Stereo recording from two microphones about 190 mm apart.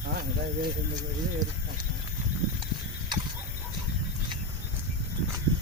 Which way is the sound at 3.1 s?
25° right (ahead or behind).